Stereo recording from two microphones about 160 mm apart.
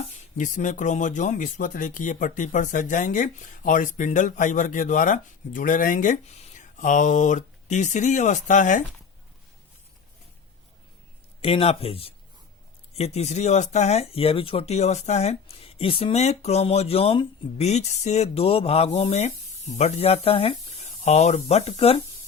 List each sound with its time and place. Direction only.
0.0 s speech: 55° left (ahead or behind)
11.3 s speech: 35° left (ahead or behind)